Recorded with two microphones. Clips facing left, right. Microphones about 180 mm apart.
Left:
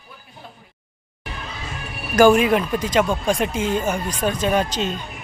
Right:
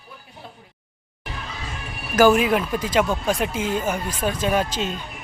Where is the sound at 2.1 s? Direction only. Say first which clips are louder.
Left 2 dB; 5° right (ahead or behind).